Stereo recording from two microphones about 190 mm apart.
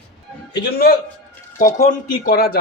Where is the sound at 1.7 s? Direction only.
40° left (ahead or behind).